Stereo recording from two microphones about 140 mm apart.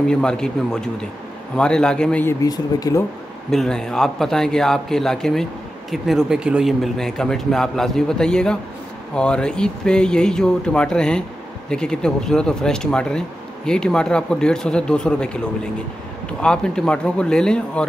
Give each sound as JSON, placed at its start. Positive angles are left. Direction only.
{"t": 0.0, "sound": "a man's voice", "side_deg": 5}
{"t": 2.4, "sound": "speech", "side_deg": 25}
{"t": 3.4, "sound": "a man's voice", "side_deg": 5}
{"t": 16.3, "sound": "a man's voice", "side_deg": 5}